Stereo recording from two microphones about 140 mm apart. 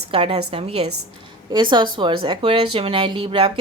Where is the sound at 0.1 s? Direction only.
40° right (ahead or behind).